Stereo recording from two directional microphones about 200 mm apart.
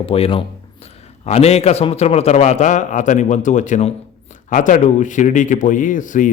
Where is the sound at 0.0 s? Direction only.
30° left (ahead or behind).